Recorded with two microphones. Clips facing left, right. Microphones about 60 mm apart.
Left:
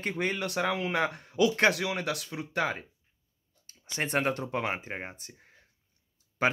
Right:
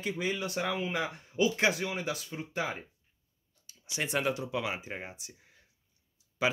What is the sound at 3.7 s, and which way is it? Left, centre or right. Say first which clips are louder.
Speech: left 3 dB; left.